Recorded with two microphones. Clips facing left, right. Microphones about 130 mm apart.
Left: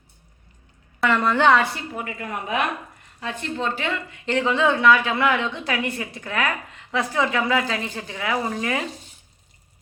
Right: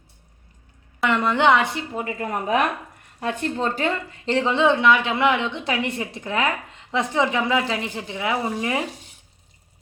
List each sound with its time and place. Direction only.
1.0 s a woman's voice: 20° right (ahead or behind)